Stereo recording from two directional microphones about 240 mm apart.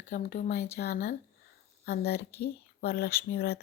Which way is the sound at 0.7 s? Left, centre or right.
Left.